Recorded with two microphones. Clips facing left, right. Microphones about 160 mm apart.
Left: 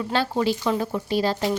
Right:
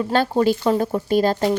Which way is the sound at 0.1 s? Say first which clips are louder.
Right 5 dB; 45° right (ahead or behind).